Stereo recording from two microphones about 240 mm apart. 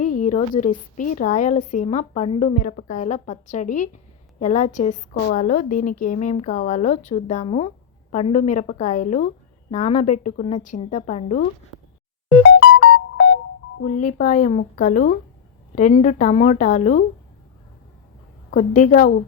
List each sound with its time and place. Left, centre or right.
0.0 s a woman's voice: left
12.5 s music: left
14.0 s a woman's voice: left
18.5 s a woman's voice: left